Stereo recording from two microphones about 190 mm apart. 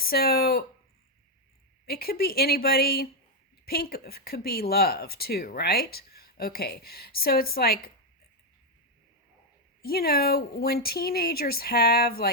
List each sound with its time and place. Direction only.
0.0 s speech: 55° left (ahead or behind)
1.9 s speech: 55° left (ahead or behind)
9.8 s speech: 50° left (ahead or behind)